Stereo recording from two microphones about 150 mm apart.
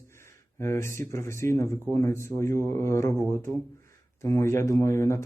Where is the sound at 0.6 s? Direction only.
20° left (ahead or behind).